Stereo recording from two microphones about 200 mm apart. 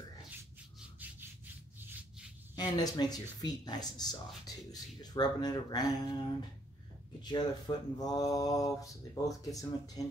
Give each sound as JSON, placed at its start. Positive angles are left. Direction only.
{"t": 2.5, "sound": "speech", "side_deg": 20}